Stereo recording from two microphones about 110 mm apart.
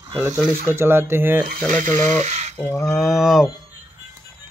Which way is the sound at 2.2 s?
90° right.